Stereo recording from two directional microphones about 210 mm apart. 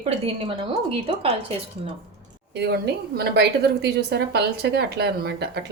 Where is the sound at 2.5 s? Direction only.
50° right (ahead or behind).